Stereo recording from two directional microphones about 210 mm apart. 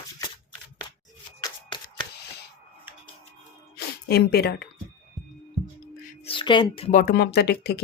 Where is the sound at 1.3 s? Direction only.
20° left (ahead or behind).